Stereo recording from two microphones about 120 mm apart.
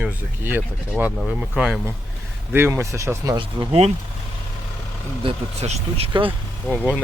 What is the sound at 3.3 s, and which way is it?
Speech, 45° right (ahead or behind).